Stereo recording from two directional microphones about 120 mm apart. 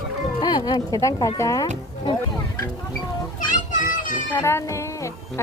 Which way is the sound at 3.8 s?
90° left.